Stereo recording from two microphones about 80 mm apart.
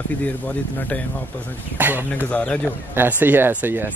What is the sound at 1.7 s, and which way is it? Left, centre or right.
Speech, right.